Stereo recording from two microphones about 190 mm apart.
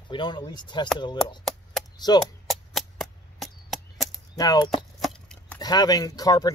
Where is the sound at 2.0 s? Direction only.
20° left (ahead or behind).